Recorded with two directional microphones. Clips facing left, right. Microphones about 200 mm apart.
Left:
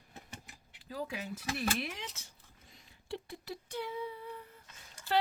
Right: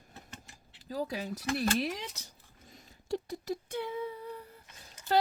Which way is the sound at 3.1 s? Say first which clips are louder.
Right 7 dB; 45° right (ahead or behind).